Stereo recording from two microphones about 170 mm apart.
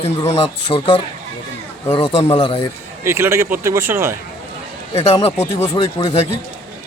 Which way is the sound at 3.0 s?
15° right (ahead or behind).